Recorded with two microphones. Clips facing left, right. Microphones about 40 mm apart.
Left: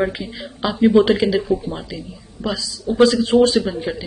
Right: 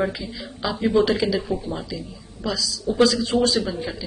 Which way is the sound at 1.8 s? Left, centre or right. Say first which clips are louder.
Left 1 dB; centre.